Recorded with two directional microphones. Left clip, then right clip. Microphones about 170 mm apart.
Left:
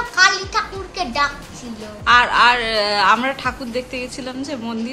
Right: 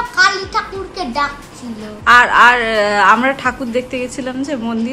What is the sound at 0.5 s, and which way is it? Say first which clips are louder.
Children playing: right 2 dB; 10° left (ahead or behind).